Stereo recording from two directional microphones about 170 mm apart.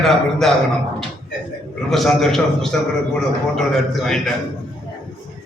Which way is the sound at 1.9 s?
Centre (ahead or behind).